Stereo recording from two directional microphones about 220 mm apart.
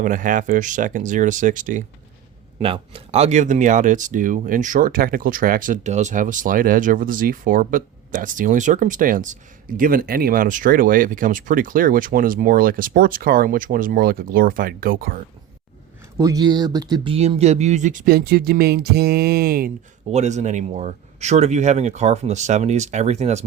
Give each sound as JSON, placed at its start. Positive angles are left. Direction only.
{"t": 0.0, "sound": "speech", "side_deg": -35}
{"t": 2.6, "sound": "speech", "side_deg": -25}
{"t": 16.1, "sound": "speech", "side_deg": -15}
{"t": 20.1, "sound": "speech", "side_deg": -30}